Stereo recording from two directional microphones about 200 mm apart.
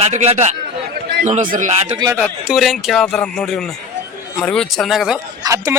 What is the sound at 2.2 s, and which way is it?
A man's voice, centre (ahead or behind).